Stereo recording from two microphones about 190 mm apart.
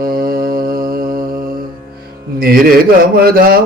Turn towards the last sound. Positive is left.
turn(degrees=-50)  # may be behind; listen again after turning